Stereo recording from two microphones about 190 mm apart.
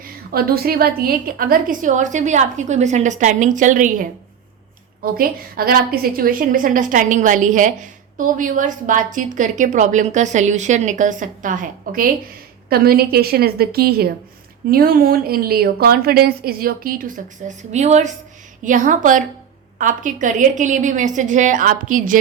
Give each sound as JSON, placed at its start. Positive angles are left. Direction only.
{"t": 0.0, "sound": "a woman's voice", "side_deg": -50}
{"t": 5.1, "sound": "a woman's voice", "side_deg": -50}